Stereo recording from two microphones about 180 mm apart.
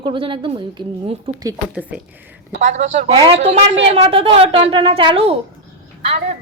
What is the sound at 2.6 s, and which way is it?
A woman's voice, 40° right (ahead or behind).